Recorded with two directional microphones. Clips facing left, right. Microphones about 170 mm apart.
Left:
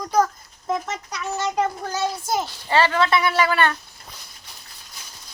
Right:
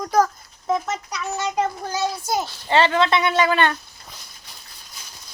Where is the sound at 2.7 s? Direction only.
25° right (ahead or behind).